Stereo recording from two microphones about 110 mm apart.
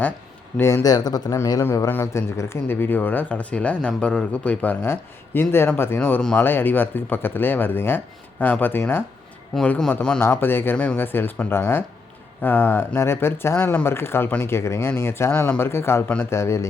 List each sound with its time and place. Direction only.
0.5 s speech: 25° left (ahead or behind)
6.0 s speech: 10° left (ahead or behind)
10.2 s speech: 20° left (ahead or behind)